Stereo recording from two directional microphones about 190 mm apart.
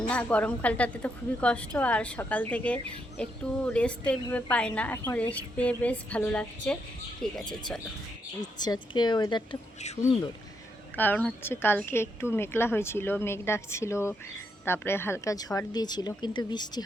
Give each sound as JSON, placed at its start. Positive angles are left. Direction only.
{"t": 0.1, "sound": "a woman's voice", "side_deg": 5}
{"t": 8.5, "sound": "speech", "side_deg": 20}
{"t": 9.8, "sound": "speech", "side_deg": 35}
{"t": 10.9, "sound": "a woman's voice", "side_deg": 10}